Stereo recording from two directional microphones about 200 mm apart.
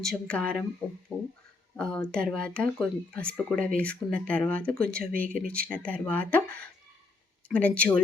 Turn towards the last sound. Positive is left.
turn(degrees=5)  # may be behind; listen again after turning